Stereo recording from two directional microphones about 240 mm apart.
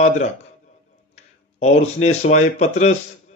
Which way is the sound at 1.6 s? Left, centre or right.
Left.